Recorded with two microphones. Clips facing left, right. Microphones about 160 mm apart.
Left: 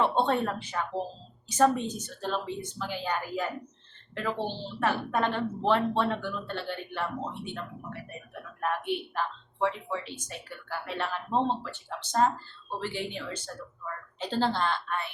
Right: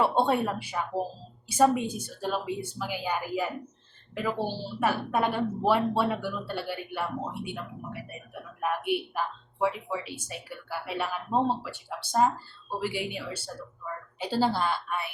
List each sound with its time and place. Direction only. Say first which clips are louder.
0.0 s speech: right 1 dB; 10° right (ahead or behind)